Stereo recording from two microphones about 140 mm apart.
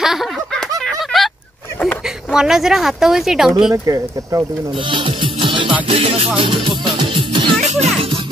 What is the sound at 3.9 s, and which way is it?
Speech, 25° right (ahead or behind).